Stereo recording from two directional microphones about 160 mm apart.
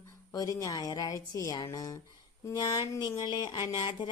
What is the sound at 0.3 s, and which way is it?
Speech, 20° left (ahead or behind).